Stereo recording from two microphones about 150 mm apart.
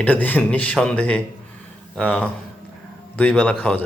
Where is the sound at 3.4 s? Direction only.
10° left (ahead or behind).